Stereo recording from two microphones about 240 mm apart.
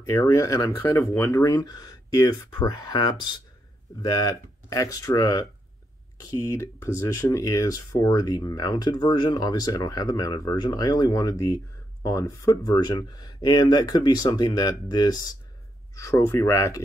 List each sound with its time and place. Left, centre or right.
0.0 s speech: centre